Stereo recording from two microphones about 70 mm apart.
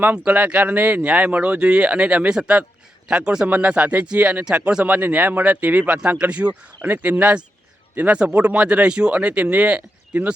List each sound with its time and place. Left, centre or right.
0.0 s speech: right